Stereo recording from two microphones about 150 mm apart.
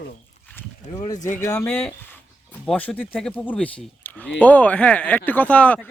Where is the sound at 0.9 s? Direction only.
25° left (ahead or behind).